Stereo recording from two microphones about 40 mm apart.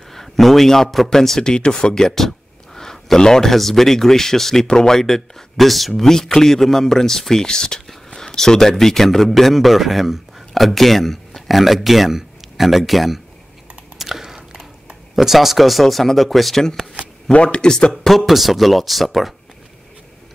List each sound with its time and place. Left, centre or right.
0.1 s a sound: centre
0.8 s a man's voice: centre
13.9 s a sound: centre
15.1 s speech: centre
17.3 s speech: left
18.0 s speech: centre